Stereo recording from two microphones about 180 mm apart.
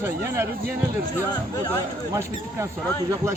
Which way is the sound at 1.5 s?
20° left (ahead or behind).